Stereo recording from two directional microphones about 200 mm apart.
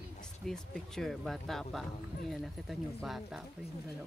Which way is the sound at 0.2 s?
Centre (ahead or behind).